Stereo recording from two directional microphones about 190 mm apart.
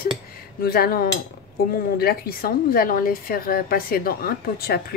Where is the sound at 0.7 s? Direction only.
55° left (ahead or behind).